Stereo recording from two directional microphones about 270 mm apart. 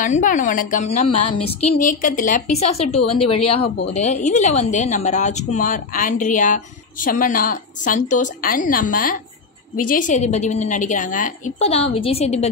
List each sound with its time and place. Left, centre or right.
0.0 s a woman's voice: left
1.0 s speech: left
1.8 s a woman's voice: left